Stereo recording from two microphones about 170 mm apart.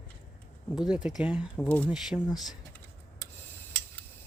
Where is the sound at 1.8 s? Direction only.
5° right (ahead or behind).